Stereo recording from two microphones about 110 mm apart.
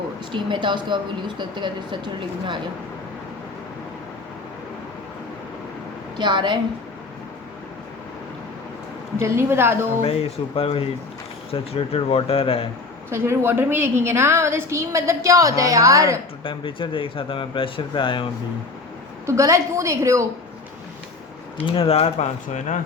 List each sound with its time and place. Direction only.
0.3 s speech: 45° right (ahead or behind)
6.1 s speech: 45° right (ahead or behind)
9.2 s a woman's voice: 25° right (ahead or behind)
10.0 s speech: 65° left (ahead or behind)
13.1 s a woman's voice: 25° right (ahead or behind)
16.4 s speech: 50° left (ahead or behind)
19.2 s a woman's voice: 30° right (ahead or behind)
21.6 s speech: 55° left (ahead or behind); by 22.7 s 90° left